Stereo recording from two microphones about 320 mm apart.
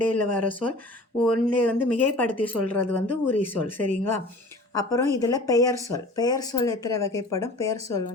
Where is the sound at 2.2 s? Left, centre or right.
Centre.